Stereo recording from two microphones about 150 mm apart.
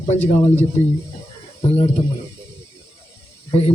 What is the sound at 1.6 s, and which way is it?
Speech, 40° left (ahead or behind).